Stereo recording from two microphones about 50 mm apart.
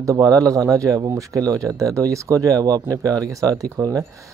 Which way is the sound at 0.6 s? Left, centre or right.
Right.